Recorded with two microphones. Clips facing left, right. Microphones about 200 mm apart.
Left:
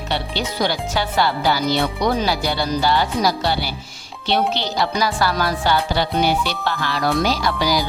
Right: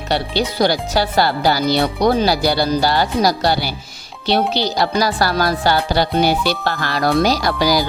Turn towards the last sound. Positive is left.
turn(degrees=-35)  # may be behind; listen again after turning